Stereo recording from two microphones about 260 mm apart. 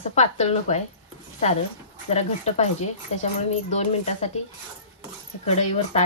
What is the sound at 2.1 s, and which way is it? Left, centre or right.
Speech, left.